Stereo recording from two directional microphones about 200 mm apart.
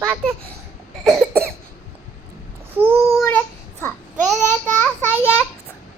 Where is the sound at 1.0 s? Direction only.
Centre (ahead or behind).